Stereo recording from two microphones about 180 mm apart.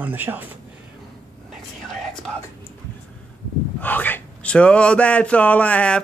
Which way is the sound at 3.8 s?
10° left (ahead or behind).